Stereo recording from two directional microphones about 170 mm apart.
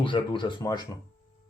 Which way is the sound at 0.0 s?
30° left (ahead or behind).